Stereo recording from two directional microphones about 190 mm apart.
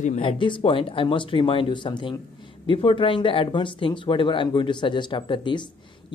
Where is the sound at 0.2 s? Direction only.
25° left (ahead or behind).